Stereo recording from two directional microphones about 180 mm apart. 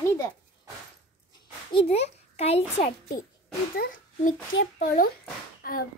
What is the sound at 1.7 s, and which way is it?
A child's voice, 35° left (ahead or behind).